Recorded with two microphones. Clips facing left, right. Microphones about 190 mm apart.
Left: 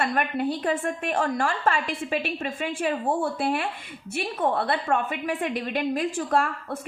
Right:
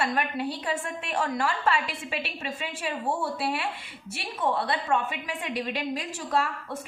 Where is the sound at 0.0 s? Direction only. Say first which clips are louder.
Left 3 dB; 55° left (ahead or behind).